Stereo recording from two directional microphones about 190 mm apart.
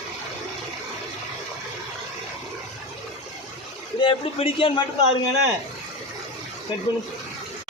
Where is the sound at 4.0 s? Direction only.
25° left (ahead or behind).